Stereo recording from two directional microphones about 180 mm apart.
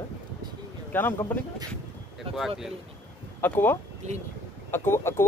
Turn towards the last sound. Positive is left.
turn(degrees=15)  # may be behind; listen again after turning